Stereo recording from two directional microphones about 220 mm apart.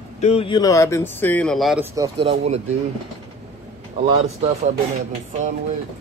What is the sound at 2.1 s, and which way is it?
Speech, 30° right (ahead or behind).